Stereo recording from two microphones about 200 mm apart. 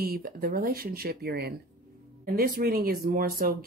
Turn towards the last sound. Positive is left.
turn(degrees=-45)  # may be behind; listen again after turning